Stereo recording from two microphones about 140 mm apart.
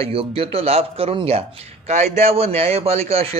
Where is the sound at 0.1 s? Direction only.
40° right (ahead or behind).